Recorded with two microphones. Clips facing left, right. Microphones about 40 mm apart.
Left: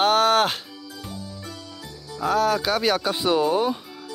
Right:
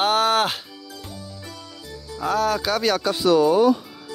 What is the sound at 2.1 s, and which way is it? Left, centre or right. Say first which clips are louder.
Speech: left 1 dB; centre.